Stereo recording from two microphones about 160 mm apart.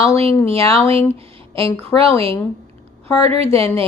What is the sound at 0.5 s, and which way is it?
Speech, 15° left (ahead or behind).